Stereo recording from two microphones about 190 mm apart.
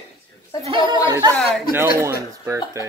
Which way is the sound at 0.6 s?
25° right (ahead or behind).